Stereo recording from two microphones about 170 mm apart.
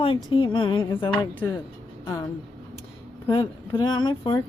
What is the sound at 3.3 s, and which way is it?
Speech, 30° left (ahead or behind).